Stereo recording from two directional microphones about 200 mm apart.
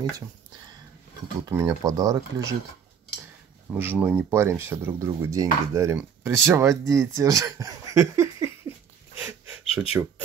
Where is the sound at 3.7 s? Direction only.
10° right (ahead or behind).